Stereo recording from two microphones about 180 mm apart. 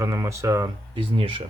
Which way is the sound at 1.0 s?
30° right (ahead or behind).